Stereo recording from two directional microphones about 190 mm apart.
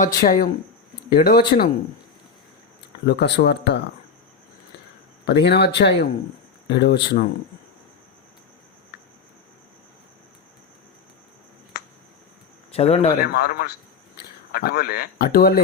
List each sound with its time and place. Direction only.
0.0 s speech: 45° left (ahead or behind)
3.1 s speech: 60° left (ahead or behind)
5.2 s speech: 60° left (ahead or behind)
12.7 s speech: 30° left (ahead or behind)
13.2 s speech: 55° left (ahead or behind)